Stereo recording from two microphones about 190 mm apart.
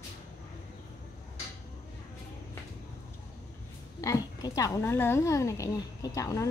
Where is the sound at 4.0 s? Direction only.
20° left (ahead or behind).